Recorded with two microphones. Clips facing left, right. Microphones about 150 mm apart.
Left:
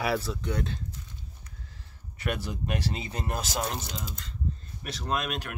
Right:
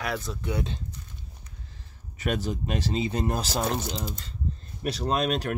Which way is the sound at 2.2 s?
20° right (ahead or behind).